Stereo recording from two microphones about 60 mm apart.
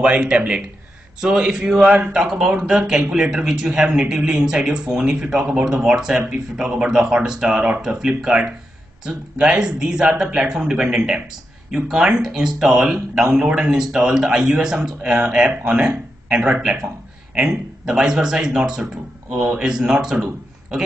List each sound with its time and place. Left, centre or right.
0.0 s a man's voice: centre